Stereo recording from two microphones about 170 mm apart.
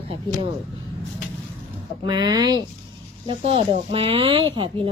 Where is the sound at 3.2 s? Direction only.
35° right (ahead or behind).